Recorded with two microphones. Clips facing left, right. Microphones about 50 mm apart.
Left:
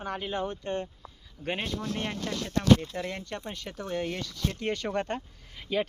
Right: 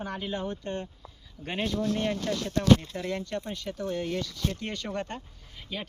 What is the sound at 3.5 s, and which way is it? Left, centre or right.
Speech, left.